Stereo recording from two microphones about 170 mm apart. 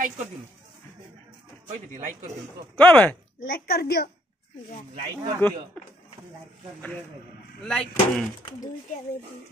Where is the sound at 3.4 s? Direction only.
60° left (ahead or behind).